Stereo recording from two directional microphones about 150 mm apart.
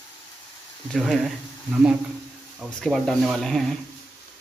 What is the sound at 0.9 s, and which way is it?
Speech, centre (ahead or behind).